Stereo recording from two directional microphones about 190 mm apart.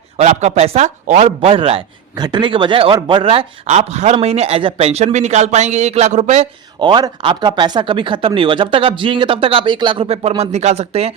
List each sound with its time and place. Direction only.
0.2 s a man's voice: 40° right (ahead or behind)